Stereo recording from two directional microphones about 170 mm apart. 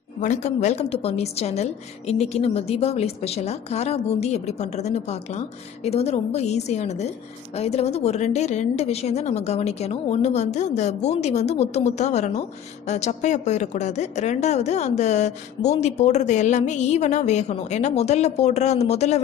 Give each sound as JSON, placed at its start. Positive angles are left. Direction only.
{"t": 0.2, "sound": "a woman's voice", "side_deg": 45}